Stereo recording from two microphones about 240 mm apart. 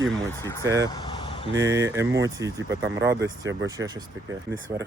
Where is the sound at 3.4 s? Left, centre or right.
Right.